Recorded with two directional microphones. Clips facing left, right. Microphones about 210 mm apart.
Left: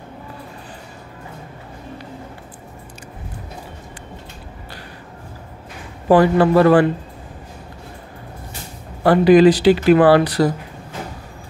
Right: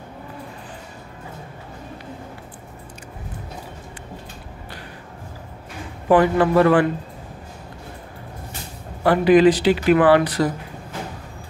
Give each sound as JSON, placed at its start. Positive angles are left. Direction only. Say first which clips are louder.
{"t": 6.0, "sound": "speech", "louder": "left 3 dB", "side_deg": 35}
{"t": 9.0, "sound": "speech", "louder": "left 3 dB", "side_deg": 35}